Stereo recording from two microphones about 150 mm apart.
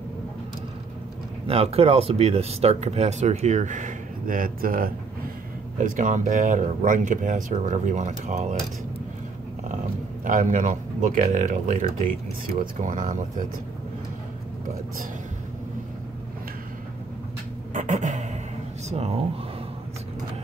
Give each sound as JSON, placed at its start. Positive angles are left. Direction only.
{"t": 1.5, "sound": "speech", "side_deg": -40}
{"t": 5.8, "sound": "speech", "side_deg": -60}
{"t": 10.2, "sound": "speech", "side_deg": -60}
{"t": 17.7, "sound": "a sound", "side_deg": -55}
{"t": 18.9, "sound": "speech", "side_deg": -45}